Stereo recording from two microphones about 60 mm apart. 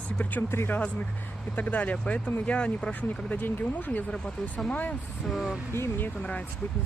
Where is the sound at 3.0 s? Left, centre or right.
Left.